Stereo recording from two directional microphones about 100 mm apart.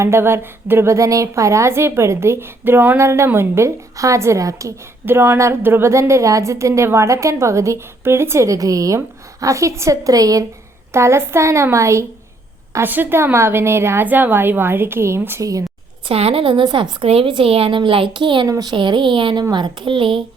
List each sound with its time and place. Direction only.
0.0 s a woman's voice: 25° right (ahead or behind)
16.0 s a woman's voice: 75° right (ahead or behind); by 18.4 s 50° right (ahead or behind)
18.4 s speech: 40° right (ahead or behind); by 20.2 s 55° right (ahead or behind)